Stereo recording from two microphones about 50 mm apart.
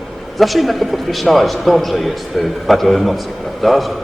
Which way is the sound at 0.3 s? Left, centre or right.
Centre.